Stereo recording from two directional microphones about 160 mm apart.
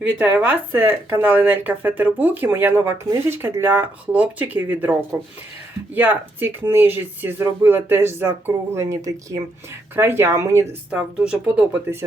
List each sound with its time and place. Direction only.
0.3 s speech: 10° right (ahead or behind)
10.9 s speech: 5° right (ahead or behind)